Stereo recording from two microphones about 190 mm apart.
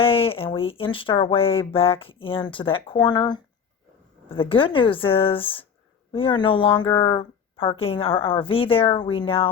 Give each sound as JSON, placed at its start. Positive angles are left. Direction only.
{"t": 0.0, "sound": "speech", "side_deg": 30}